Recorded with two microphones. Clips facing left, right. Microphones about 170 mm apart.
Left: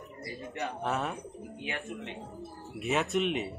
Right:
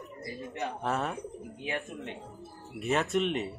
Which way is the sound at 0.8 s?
Centre (ahead or behind).